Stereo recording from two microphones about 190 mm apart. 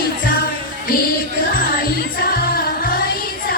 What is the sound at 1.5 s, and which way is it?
Music, 50° left (ahead or behind).